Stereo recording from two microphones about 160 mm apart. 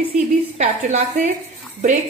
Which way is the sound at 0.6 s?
45° right (ahead or behind).